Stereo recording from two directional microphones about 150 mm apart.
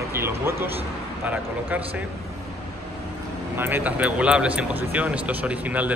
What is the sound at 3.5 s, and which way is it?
A man's voice, 15° right (ahead or behind).